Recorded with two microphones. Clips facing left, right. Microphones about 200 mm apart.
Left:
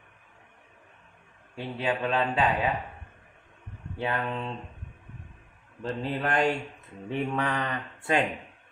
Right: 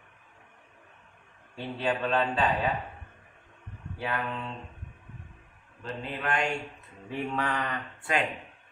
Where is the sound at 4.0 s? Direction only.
25° left (ahead or behind).